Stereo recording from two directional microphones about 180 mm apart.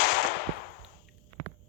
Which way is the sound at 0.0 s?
65° left (ahead or behind).